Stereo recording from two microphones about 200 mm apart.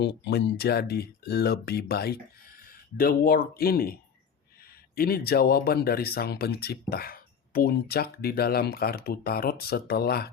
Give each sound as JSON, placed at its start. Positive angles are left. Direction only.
{"t": 0.3, "sound": "speech", "side_deg": 55}
{"t": 4.9, "sound": "speech", "side_deg": 50}